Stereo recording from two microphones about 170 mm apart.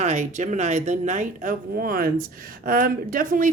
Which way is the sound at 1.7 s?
60° right (ahead or behind).